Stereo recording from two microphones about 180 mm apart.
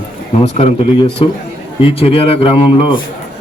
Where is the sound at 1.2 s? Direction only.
30° left (ahead or behind).